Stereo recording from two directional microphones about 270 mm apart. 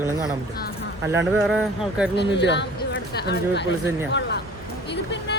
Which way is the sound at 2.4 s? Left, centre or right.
Left.